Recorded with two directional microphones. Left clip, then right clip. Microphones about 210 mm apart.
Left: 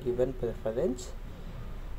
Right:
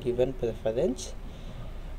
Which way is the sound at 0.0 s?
Centre (ahead or behind).